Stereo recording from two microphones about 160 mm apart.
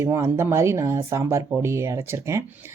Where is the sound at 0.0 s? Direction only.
15° right (ahead or behind).